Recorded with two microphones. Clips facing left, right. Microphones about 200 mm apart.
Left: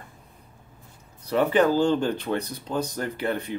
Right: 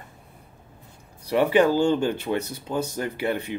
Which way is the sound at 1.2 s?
10° right (ahead or behind).